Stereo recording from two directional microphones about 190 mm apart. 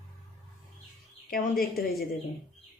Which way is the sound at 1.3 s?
50° left (ahead or behind).